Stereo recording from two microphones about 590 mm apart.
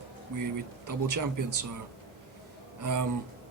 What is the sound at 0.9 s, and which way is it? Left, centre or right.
Speech, right.